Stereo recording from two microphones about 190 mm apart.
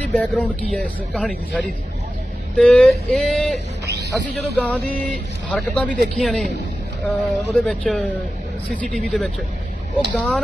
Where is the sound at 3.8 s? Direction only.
60° right (ahead or behind).